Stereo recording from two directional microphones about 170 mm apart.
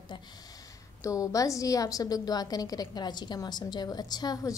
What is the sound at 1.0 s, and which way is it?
A woman's voice, 20° left (ahead or behind).